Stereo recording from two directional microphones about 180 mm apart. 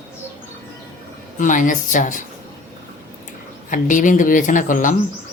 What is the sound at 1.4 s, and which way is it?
Speech, 45° left (ahead or behind).